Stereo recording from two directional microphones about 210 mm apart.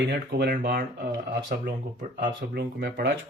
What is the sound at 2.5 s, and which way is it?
Speech, 50° right (ahead or behind).